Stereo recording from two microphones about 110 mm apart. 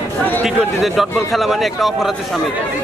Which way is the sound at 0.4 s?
5° right (ahead or behind).